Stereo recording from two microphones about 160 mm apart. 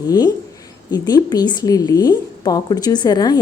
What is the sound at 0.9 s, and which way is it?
A woman's voice, 25° left (ahead or behind).